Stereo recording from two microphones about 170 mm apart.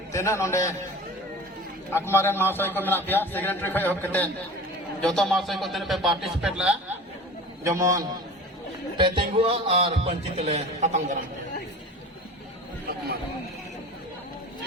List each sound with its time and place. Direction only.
0.1 s a man's voice: 15° left (ahead or behind)
1.9 s a man's voice: 15° left (ahead or behind); by 6.7 s 5° right (ahead or behind)
7.6 s a man's voice: 20° right (ahead or behind); by 11.2 s 45° right (ahead or behind)